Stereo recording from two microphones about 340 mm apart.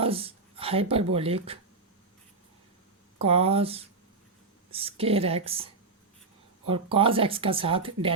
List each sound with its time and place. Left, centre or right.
0.0 s speech: centre
3.2 s speech: centre